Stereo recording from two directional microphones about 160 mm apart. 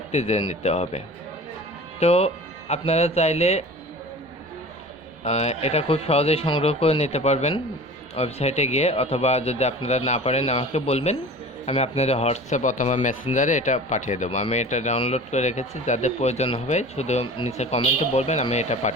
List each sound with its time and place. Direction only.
0.1 s speech: 45° left (ahead or behind)
5.2 s speech: 45° left (ahead or behind)